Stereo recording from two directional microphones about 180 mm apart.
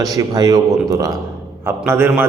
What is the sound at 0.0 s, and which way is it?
A man's voice, 20° right (ahead or behind).